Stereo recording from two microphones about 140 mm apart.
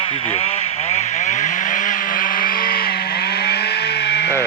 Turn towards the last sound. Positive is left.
turn(degrees=90)